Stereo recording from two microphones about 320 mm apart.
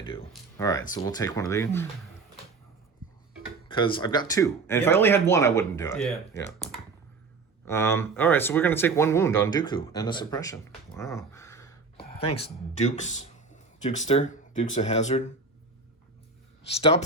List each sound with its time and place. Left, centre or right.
0.0 s speech: centre
3.7 s speech: centre
12.3 s speech: centre
16.6 s speech: centre